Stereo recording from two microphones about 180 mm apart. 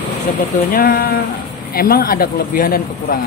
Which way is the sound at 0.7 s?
55° left (ahead or behind).